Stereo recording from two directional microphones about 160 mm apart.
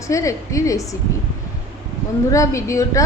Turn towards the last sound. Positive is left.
turn(degrees=20)  # may be behind; listen again after turning